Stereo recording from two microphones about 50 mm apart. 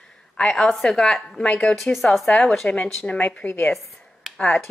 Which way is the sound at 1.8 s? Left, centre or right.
Centre.